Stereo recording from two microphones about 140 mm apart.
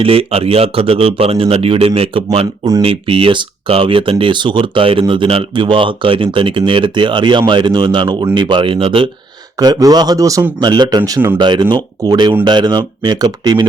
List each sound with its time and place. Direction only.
0.0 s speech: 45° right (ahead or behind)
9.6 s speech: 25° right (ahead or behind)